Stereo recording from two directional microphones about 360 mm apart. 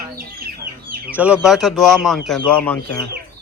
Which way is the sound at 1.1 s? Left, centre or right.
Centre.